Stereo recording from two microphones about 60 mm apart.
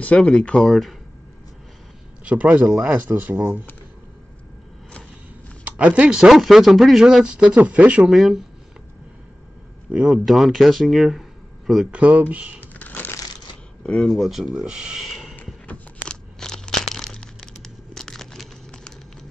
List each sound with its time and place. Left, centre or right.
0.1 s speech: left
0.6 s speech: centre
2.2 s speech: right
5.6 s a sound: right
6.0 s speech: centre
7.3 s speech: centre
8.1 s speech: centre
10.0 s speech: centre
11.9 s speech: right
12.7 s crushing: left
13.8 s speech: centre
14.3 s speech: centre
15.6 s a sound: left
16.1 s crumpling: centre